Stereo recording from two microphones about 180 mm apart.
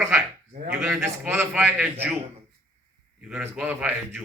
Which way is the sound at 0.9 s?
15° right (ahead or behind).